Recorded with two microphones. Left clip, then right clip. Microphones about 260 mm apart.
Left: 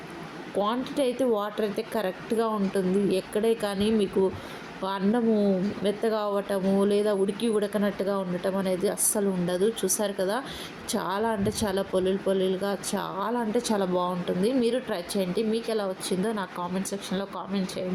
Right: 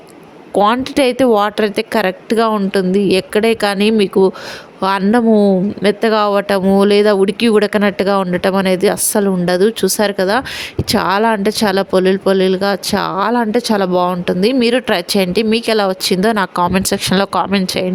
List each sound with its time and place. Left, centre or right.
0.6 s speech: right